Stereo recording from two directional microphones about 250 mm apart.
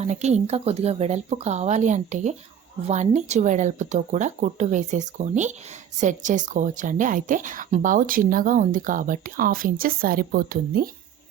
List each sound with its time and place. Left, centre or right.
0.0 s speech: right